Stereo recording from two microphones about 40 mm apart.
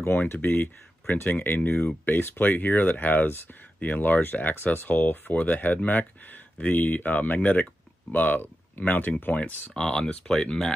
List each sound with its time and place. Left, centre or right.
0.2 s speech: left
1.6 s speech: left
2.0 s speech: left
5.3 s speech: left
9.8 s speech: centre